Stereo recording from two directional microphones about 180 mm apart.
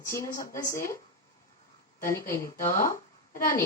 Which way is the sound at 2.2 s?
50° left (ahead or behind).